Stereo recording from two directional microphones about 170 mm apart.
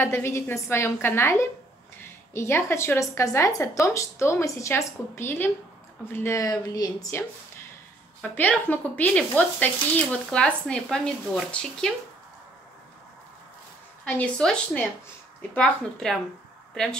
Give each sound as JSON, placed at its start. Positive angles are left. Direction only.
{"t": 0.0, "sound": "a woman's voice", "side_deg": 15}
{"t": 14.0, "sound": "a woman's voice", "side_deg": 5}